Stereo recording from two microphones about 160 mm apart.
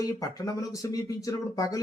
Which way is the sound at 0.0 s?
20° left (ahead or behind).